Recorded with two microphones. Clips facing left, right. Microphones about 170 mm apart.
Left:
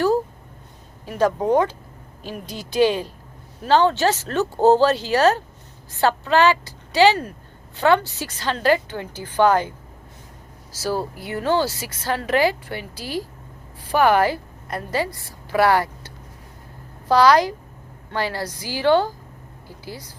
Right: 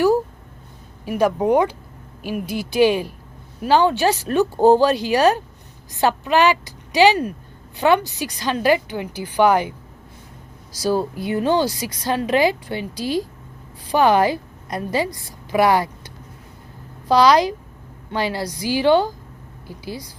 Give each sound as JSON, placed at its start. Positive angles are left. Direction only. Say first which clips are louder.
{"t": 1.0, "sound": "a woman's voice", "louder": "right 2 dB", "side_deg": -15}